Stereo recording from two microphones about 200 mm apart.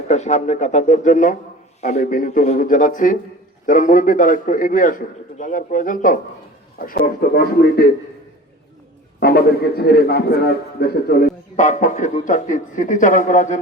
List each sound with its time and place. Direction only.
0.1 s a man's voice: 35° left (ahead or behind)
9.2 s a man's voice: 50° left (ahead or behind)